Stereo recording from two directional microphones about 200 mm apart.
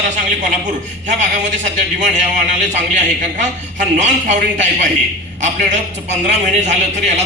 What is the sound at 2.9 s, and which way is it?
A man's voice, 40° right (ahead or behind).